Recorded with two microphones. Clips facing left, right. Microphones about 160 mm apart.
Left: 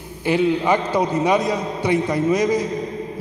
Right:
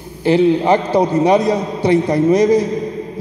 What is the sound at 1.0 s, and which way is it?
A man's voice, 35° right (ahead or behind).